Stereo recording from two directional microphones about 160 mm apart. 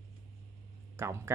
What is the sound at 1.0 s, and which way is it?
Speech, 15° right (ahead or behind).